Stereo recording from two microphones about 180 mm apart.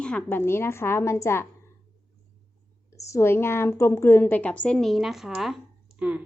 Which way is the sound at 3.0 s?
15° left (ahead or behind).